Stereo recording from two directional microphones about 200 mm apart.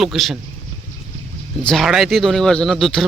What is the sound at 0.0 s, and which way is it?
Speech, centre (ahead or behind).